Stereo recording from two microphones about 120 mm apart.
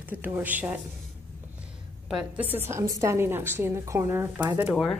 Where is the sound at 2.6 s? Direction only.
25° right (ahead or behind).